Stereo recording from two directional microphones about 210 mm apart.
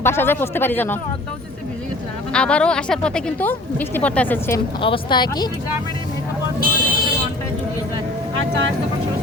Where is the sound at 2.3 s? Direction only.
5° left (ahead or behind).